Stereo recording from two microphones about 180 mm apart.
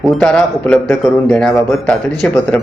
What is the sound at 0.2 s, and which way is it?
Speech, 5° left (ahead or behind).